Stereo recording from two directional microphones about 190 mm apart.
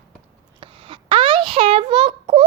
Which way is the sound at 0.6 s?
30° right (ahead or behind).